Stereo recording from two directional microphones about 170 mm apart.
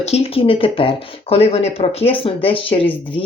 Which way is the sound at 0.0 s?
35° left (ahead or behind).